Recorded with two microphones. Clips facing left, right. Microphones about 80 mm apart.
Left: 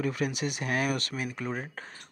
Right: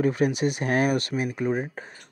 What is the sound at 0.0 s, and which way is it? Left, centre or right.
Speech, right.